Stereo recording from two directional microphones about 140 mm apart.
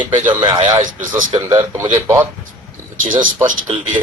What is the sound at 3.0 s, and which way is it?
Speech, 70° right (ahead or behind).